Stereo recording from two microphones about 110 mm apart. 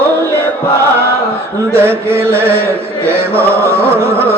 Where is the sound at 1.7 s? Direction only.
20° right (ahead or behind).